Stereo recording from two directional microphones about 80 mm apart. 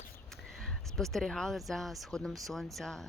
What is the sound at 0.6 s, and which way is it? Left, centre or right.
Speech, centre.